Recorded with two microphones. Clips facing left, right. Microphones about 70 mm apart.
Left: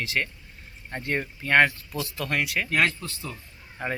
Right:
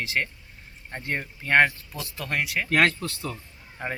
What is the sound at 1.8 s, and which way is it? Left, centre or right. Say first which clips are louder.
Speech: left 4 dB; right.